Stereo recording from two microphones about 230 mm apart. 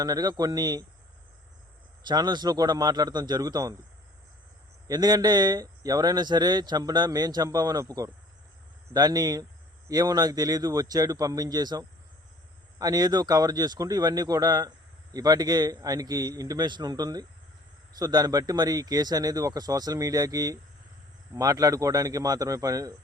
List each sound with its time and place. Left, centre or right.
0.0 s speech: centre
2.0 s speech: centre
4.9 s speech: centre